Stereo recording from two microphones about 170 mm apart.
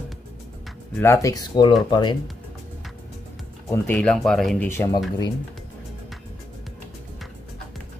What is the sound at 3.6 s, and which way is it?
Speech, 15° left (ahead or behind).